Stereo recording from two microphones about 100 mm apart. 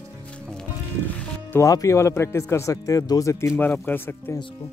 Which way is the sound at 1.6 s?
35° left (ahead or behind).